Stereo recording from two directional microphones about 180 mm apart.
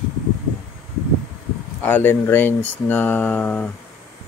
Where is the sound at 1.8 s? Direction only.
10° left (ahead or behind).